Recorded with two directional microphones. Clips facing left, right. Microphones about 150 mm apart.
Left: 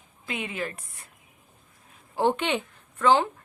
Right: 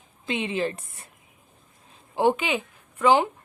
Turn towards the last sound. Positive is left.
turn(degrees=-15)  # may be behind; listen again after turning